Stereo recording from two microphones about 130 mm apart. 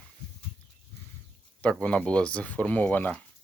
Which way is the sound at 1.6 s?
10° left (ahead or behind).